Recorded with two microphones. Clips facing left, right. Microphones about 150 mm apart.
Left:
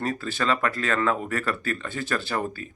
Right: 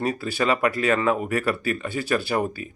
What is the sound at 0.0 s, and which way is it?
Speech, 10° right (ahead or behind).